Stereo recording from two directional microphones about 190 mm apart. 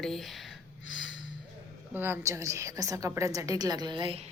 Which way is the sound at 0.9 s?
90° left.